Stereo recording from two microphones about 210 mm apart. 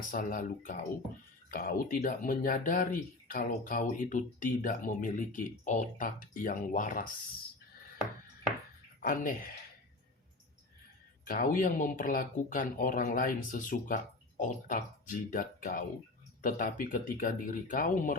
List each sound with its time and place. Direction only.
0.1 s speech: 40° left (ahead or behind)
9.0 s speech: 40° left (ahead or behind)
11.3 s speech: 40° left (ahead or behind)